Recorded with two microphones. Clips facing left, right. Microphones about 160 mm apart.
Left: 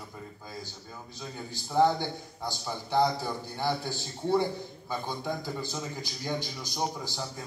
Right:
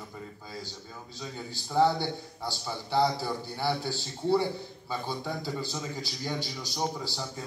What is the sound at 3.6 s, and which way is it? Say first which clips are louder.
Speech: even; 15° left (ahead or behind).